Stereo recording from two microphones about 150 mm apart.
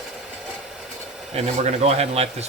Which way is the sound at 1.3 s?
45° right (ahead or behind).